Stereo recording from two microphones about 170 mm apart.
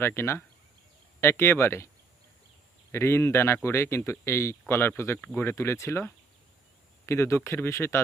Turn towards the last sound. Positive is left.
turn(degrees=15)  # may be behind; listen again after turning